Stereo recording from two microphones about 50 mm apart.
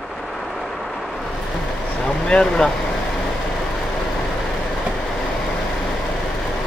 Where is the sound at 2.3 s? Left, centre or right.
Centre.